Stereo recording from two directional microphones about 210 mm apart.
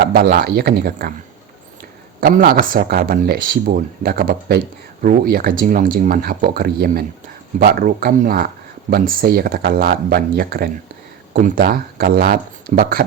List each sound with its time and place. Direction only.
0.0 s speech: 45° right (ahead or behind)
2.2 s speech: 45° right (ahead or behind)